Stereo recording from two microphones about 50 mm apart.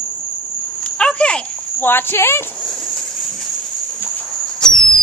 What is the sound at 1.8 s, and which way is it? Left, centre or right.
Speech, left.